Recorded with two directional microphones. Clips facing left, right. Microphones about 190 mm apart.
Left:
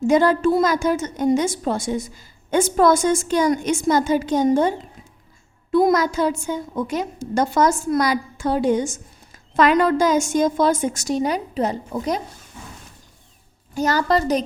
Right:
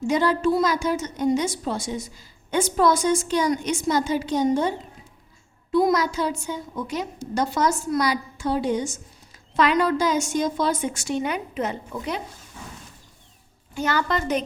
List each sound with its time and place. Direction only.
0.1 s a woman's voice: 50° left (ahead or behind)
5.7 s a woman's voice: 50° left (ahead or behind)
13.7 s a woman's voice: 40° left (ahead or behind)